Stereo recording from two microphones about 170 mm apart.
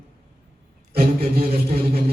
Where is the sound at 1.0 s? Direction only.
35° right (ahead or behind).